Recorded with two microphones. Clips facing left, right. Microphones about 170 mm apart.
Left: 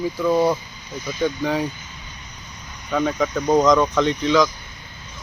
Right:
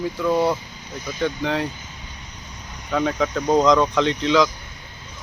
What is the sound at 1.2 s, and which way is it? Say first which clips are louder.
Speech: left 1 dB; 5° left (ahead or behind).